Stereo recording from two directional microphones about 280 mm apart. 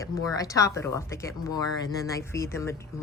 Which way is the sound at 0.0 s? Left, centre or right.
Centre.